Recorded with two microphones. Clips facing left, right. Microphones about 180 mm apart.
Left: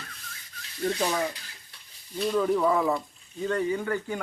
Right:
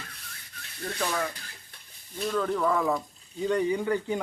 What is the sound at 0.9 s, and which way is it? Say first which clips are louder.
Speech: left 4 dB; 20° left (ahead or behind).